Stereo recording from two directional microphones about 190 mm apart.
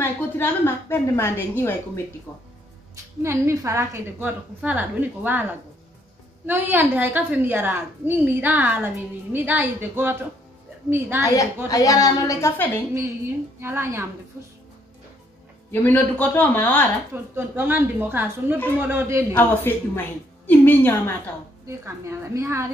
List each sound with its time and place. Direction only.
0.0 s a woman's voice: 10° left (ahead or behind)
3.2 s a woman's voice: 15° right (ahead or behind)
11.2 s a woman's voice: 15° left (ahead or behind)
13.6 s a woman's voice: 15° right (ahead or behind)
15.7 s a woman's voice: 10° left (ahead or behind)
17.1 s a woman's voice: 10° right (ahead or behind)
19.3 s a woman's voice: 10° left (ahead or behind)
21.6 s a woman's voice: 15° right (ahead or behind)